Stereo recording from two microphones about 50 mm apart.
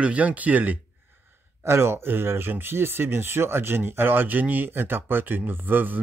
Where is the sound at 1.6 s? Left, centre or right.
Right.